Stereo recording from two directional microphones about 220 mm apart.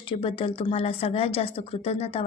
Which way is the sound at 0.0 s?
25° left (ahead or behind).